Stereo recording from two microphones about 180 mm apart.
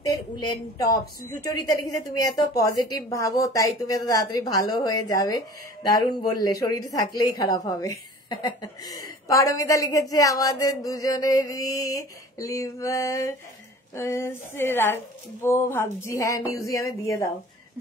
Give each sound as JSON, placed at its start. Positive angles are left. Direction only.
{"t": 0.1, "sound": "a woman's voice", "side_deg": 20}